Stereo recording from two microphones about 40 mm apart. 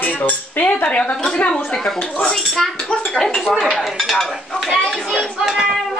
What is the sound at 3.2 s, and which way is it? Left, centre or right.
A woman's voice, centre.